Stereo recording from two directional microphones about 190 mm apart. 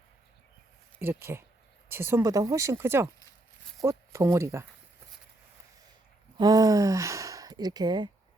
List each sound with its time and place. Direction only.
0.9 s speech: 10° right (ahead or behind)
6.3 s speech: 20° right (ahead or behind)